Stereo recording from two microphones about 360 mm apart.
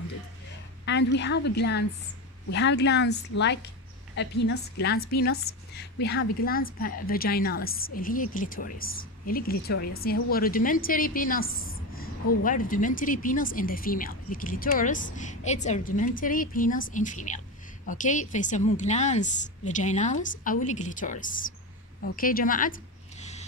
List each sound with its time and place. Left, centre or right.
0.8 s a woman's voice: left